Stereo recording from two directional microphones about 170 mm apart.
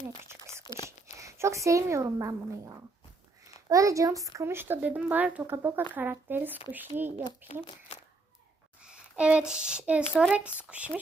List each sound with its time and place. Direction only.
0.7 s whispering: 25° left (ahead or behind)
1.1 s a woman's voice: 15° right (ahead or behind)
3.7 s speech: 20° right (ahead or behind)
8.8 s speech: 5° right (ahead or behind)